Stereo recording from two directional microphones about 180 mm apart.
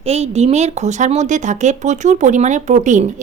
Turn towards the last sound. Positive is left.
turn(degrees=-45)  # may be behind; listen again after turning